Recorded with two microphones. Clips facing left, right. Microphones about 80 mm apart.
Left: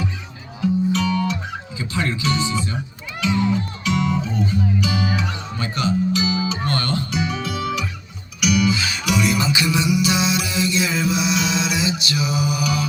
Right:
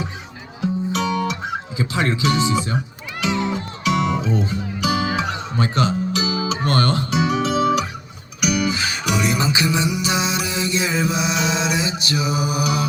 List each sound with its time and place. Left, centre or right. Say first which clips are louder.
0.9 s music: even; right
1.8 s music: right 3 dB; right
4.3 s speech: right 2 dB; right
4.8 s music: right 2 dB; right
7.3 s guitar: right 7 dB; right
8.4 s music: left 2 dB; right